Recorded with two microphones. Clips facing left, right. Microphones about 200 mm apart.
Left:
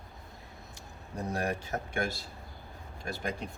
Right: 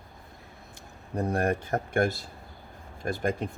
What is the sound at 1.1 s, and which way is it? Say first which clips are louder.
Speech: right 6 dB; 55° right (ahead or behind).